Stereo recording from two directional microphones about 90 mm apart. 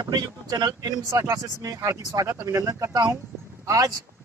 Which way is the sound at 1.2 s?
40° right (ahead or behind).